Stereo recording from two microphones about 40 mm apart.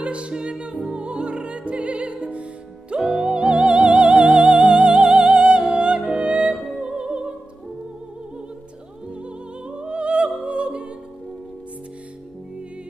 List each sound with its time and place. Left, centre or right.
0.0 s music: right
3.0 s music: centre
3.3 s music: right
6.7 s opera: right
9.1 s music: right